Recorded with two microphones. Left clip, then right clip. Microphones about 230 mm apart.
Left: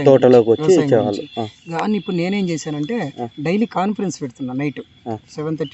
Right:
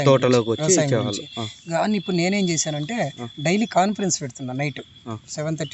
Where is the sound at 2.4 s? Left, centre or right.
Right.